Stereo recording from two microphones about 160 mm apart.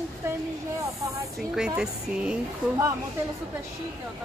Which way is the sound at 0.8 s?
20° right (ahead or behind).